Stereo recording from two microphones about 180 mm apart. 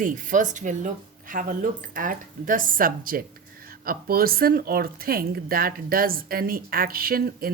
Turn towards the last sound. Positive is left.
turn(degrees=-55)  # may be behind; listen again after turning